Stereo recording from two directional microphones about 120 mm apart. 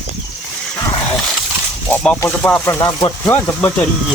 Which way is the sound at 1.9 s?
10° left (ahead or behind).